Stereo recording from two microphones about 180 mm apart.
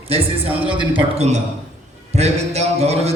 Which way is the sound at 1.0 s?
35° right (ahead or behind).